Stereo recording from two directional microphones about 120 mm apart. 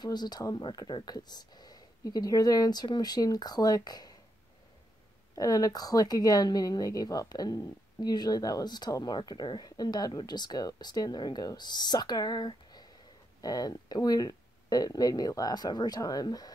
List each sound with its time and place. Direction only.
0.0 s speech: 35° left (ahead or behind)
5.3 s speech: 30° left (ahead or behind)